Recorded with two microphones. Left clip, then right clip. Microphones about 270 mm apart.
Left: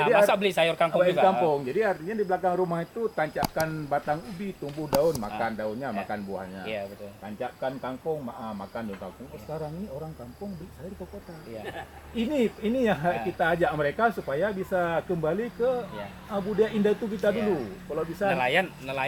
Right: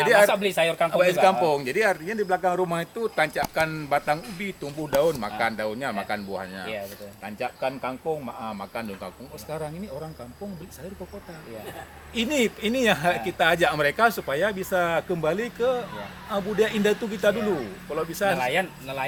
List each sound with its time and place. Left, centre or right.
0.0 s speech: centre
3.2 s speech: centre
12.1 s speech: centre